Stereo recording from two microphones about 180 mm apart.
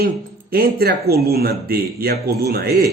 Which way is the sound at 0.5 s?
60° right (ahead or behind).